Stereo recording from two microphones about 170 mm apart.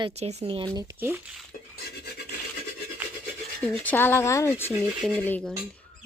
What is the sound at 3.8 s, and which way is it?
Speech, 10° left (ahead or behind).